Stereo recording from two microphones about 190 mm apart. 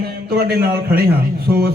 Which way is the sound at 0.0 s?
55° right (ahead or behind).